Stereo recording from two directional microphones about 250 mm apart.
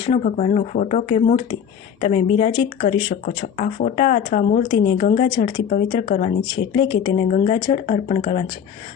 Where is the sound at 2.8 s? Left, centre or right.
Left.